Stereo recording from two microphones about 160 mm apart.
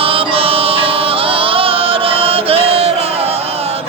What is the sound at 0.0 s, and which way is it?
Music, 35° right (ahead or behind).